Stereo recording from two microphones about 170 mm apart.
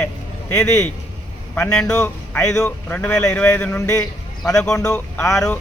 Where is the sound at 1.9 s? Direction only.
15° left (ahead or behind).